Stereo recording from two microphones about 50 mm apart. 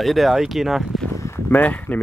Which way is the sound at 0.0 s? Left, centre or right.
Centre.